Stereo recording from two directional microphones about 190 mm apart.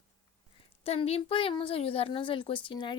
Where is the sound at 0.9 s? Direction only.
30° left (ahead or behind).